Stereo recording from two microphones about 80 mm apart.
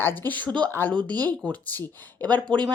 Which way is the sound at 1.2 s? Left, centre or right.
Centre.